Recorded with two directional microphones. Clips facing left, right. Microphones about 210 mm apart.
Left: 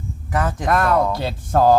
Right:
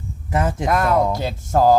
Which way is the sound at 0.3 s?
25° right (ahead or behind).